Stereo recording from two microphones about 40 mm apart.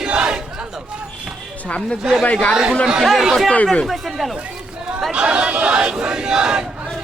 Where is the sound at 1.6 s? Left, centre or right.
Left.